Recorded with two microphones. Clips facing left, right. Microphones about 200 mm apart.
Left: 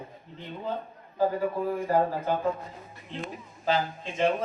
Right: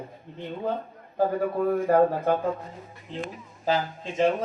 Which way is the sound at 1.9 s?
55° right (ahead or behind).